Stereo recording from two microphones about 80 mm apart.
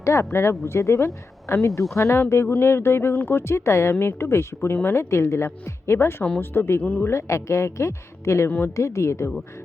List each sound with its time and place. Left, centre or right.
0.0 s speech: left
7.1 s speech: left
8.4 s speech: left
8.7 s speech: left